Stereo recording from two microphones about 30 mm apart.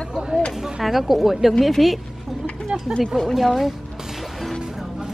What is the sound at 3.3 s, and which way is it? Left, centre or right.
Speech, centre.